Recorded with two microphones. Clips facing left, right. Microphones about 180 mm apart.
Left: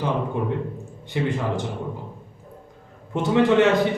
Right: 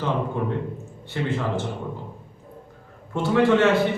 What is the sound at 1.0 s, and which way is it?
Speech, 15° left (ahead or behind).